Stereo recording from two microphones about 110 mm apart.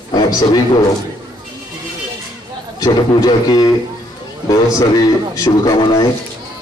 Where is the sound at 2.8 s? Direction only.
35° left (ahead or behind).